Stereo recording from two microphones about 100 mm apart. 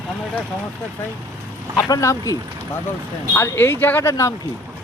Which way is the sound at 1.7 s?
30° left (ahead or behind).